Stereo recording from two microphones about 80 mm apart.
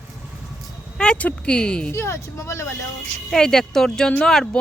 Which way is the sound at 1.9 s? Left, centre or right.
Left.